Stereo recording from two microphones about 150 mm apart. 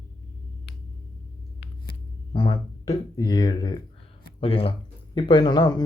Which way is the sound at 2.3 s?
25° left (ahead or behind).